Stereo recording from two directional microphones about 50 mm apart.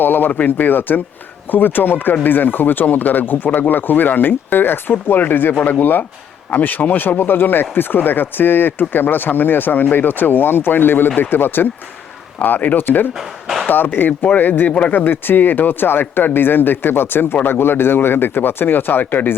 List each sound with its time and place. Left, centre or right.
0.0 s speech: left
12.4 s speech: left
13.1 s a sound: centre
13.7 s speech: left